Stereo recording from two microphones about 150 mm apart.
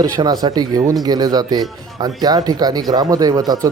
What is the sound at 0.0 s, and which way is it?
Speech, 25° right (ahead or behind).